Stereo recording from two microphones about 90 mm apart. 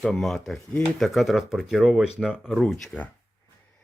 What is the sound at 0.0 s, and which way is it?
Speech, 5° left (ahead or behind).